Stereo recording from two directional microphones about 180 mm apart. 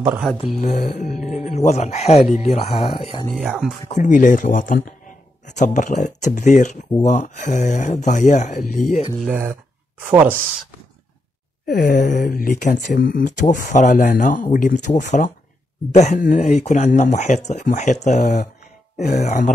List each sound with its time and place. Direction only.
0.6 s speech: 40° left (ahead or behind)
3.4 s speech: centre (ahead or behind)
3.9 s speech: 45° left (ahead or behind)
9.2 s speech: 10° right (ahead or behind)
11.6 s speech: 50° left (ahead or behind)